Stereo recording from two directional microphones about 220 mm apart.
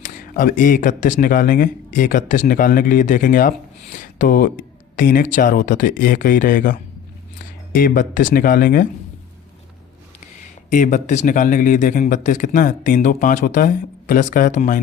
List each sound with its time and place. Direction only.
0.0 s speech: 35° left (ahead or behind)
10.7 s speech: 35° left (ahead or behind)